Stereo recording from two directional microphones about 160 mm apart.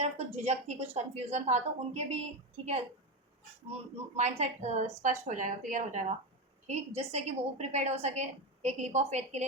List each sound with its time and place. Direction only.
0.0 s a woman's voice: 45° right (ahead or behind)
3.7 s a woman's voice: 40° right (ahead or behind)